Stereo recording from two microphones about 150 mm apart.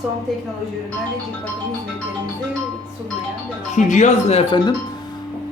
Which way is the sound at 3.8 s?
55° left (ahead or behind).